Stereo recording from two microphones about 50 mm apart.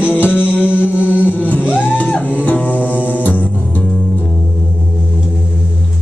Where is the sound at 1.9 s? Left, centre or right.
Left.